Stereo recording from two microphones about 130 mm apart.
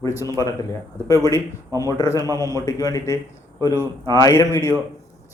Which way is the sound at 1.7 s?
30° left (ahead or behind).